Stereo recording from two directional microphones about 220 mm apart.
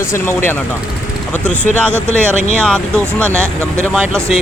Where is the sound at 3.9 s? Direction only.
Centre (ahead or behind).